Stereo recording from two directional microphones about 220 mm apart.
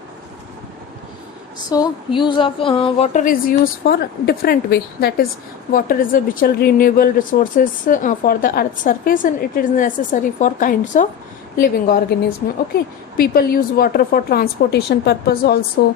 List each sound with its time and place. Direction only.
1.7 s a woman's voice: 20° left (ahead or behind); by 15.6 s 45° left (ahead or behind)